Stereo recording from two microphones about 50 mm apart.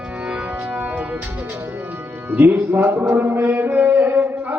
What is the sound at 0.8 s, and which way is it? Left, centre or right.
Music, right.